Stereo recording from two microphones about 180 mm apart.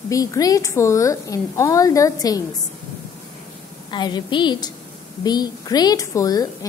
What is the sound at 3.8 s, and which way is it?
A woman's voice, 25° left (ahead or behind).